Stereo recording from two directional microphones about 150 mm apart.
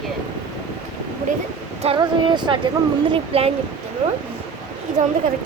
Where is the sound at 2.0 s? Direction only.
30° right (ahead or behind).